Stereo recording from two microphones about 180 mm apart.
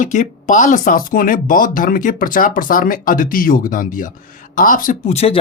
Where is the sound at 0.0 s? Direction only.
45° left (ahead or behind).